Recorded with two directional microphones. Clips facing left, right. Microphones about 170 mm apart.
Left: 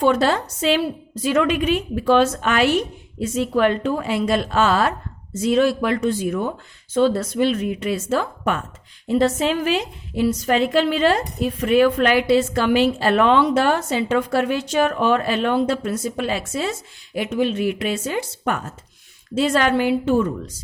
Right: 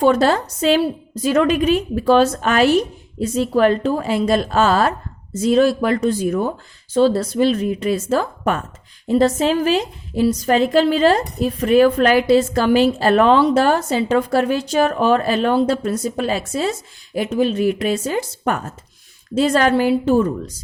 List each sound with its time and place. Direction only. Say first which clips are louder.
0.0 s a woman's voice: right 3 dB; 40° right (ahead or behind)